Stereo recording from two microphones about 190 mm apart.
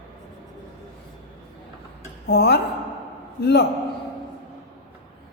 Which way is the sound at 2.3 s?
60° left (ahead or behind).